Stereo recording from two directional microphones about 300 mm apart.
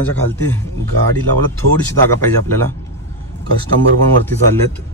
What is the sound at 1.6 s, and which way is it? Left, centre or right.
Speech, right.